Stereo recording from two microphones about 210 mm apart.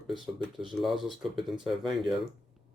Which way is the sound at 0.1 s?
Centre (ahead or behind).